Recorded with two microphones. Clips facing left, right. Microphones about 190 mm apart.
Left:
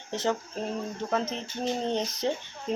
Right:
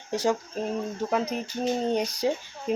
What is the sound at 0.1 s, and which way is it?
Speech, 10° right (ahead or behind).